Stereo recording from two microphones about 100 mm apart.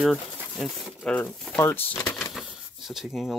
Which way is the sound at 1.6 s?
25° left (ahead or behind).